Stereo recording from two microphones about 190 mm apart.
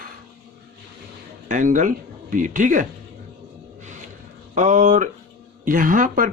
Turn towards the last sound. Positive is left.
turn(degrees=-45)  # may be behind; listen again after turning